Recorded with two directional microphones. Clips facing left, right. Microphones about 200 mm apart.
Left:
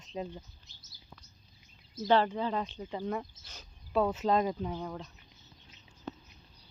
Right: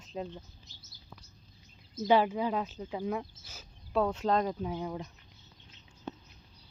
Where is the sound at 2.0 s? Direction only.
10° right (ahead or behind).